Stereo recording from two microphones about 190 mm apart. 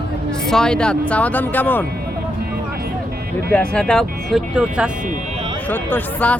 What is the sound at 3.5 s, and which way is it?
Speech, 5° left (ahead or behind).